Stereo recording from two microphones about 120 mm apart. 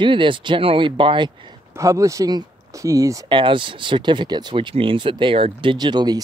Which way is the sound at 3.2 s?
45° right (ahead or behind).